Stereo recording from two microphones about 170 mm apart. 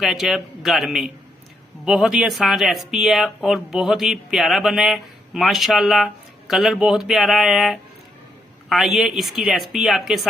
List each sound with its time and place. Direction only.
0.0 s speech: centre (ahead or behind)